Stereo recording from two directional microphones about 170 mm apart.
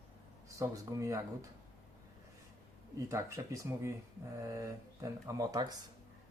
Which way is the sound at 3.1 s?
15° right (ahead or behind).